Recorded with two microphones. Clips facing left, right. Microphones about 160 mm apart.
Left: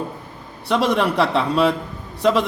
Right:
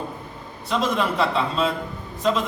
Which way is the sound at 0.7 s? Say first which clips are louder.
Left 4 dB; 70° left (ahead or behind).